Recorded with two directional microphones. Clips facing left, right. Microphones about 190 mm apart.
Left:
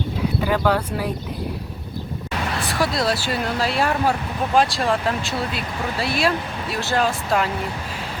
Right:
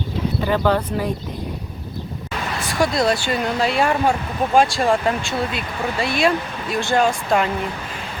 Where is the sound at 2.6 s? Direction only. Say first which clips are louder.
Right 4 dB; centre (ahead or behind).